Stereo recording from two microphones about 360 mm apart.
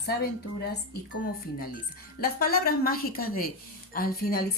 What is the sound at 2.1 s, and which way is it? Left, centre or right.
A woman's voice, left.